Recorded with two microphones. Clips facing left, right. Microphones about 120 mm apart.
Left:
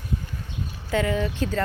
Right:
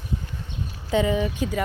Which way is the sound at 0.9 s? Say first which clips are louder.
Right 2 dB; 15° right (ahead or behind).